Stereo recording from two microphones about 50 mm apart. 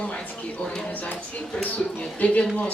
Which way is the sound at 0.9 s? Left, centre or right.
Left.